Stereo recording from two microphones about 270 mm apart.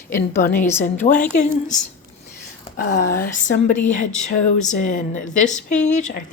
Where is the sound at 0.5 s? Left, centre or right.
Centre.